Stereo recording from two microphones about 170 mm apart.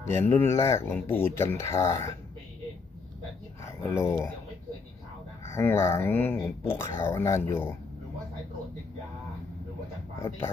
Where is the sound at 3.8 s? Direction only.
15° left (ahead or behind).